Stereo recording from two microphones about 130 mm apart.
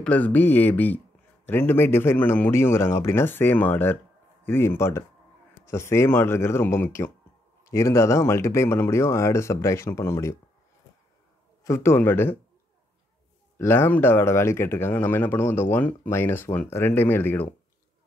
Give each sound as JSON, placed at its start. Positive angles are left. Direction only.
{"t": 0.0, "sound": "speech", "side_deg": 10}
{"t": 11.6, "sound": "speech", "side_deg": 20}
{"t": 13.6, "sound": "speech", "side_deg": 20}